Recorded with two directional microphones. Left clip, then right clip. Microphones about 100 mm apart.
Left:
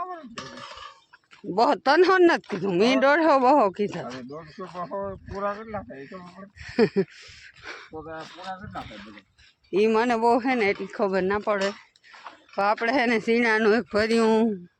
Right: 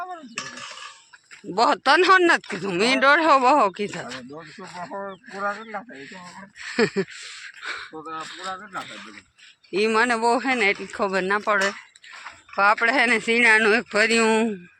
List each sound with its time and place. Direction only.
0.0 s dishes: 30° left (ahead or behind)
1.5 s speech: 35° left (ahead or behind)
5.3 s speech: 25° left (ahead or behind)
9.7 s speech: 30° left (ahead or behind)
12.8 s speech: 40° left (ahead or behind)